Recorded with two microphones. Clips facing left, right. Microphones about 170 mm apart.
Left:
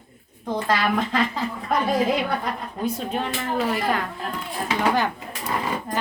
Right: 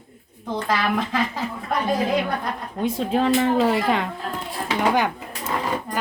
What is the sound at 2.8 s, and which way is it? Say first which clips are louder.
Speech: right 6 dB; 90° right.